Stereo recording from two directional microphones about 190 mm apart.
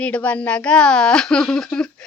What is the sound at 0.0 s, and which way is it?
Speech, 5° left (ahead or behind).